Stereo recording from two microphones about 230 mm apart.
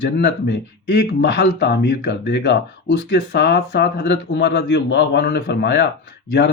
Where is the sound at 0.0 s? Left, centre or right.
Left.